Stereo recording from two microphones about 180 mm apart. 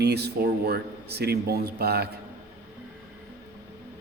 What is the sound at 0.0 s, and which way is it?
Speech, 65° right (ahead or behind).